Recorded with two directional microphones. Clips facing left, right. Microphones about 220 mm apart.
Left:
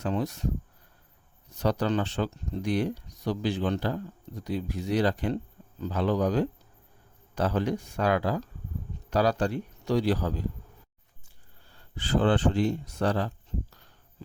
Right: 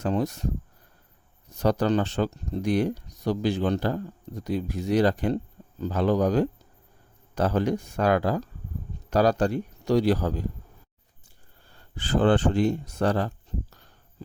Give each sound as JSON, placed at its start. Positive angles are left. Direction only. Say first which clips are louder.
{"t": 0.0, "sound": "speech", "louder": "right 3 dB", "side_deg": -45}
{"t": 1.5, "sound": "speech", "louder": "right 4 dB", "side_deg": -45}
{"t": 11.9, "sound": "speech", "louder": "right 3 dB", "side_deg": -45}